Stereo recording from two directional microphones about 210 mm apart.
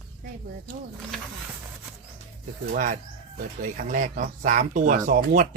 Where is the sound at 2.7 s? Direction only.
40° right (ahead or behind).